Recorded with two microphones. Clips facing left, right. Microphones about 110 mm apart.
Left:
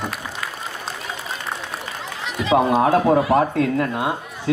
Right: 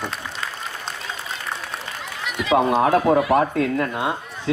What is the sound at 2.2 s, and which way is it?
Speech, 30° left (ahead or behind).